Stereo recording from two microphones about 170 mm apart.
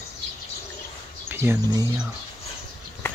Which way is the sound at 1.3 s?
15° right (ahead or behind).